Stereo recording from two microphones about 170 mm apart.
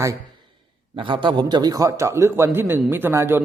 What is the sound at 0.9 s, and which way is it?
A man's voice, 30° right (ahead or behind).